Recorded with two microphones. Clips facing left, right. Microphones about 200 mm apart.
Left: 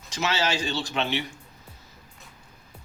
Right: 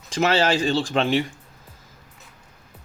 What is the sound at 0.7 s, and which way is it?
Speech, 90° right.